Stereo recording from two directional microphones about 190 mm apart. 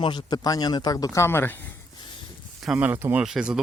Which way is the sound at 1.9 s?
25° left (ahead or behind).